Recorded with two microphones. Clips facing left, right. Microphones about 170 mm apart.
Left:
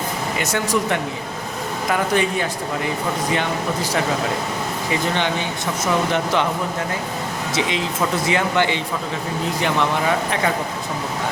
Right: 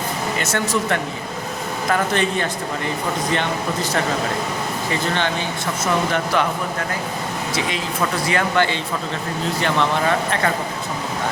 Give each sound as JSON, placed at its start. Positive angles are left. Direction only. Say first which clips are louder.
{"t": 0.3, "sound": "speech", "louder": "left 1 dB", "side_deg": 15}
{"t": 8.3, "sound": "speech", "louder": "right 1 dB", "side_deg": 15}